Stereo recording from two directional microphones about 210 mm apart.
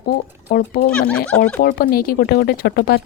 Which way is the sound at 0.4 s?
45° left (ahead or behind).